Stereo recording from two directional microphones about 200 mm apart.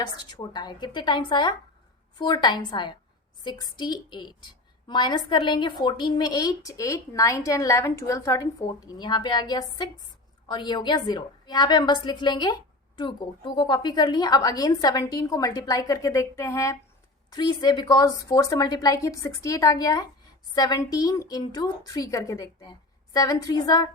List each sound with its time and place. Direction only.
0.0 s a woman's voice: 20° left (ahead or behind)